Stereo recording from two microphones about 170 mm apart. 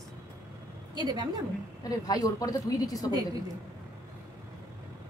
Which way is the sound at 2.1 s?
20° left (ahead or behind).